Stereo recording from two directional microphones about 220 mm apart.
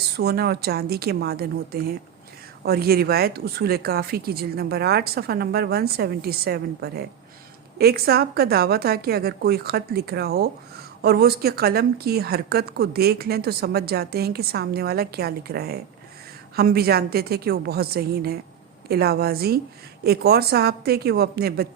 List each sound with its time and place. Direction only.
0.2 s a woman's voice: 45° right (ahead or behind)